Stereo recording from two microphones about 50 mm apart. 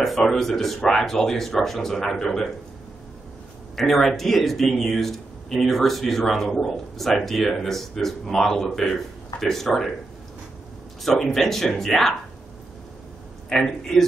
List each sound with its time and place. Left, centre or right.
0.0 s speech: centre
3.7 s speech: centre
11.0 s speech: centre
13.5 s speech: centre